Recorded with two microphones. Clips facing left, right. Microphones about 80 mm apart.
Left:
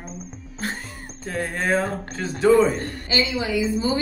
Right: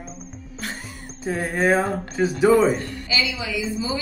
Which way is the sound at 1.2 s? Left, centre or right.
Centre.